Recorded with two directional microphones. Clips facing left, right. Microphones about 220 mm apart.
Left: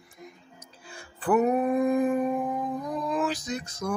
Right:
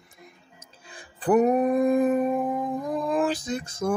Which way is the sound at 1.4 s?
40° right (ahead or behind).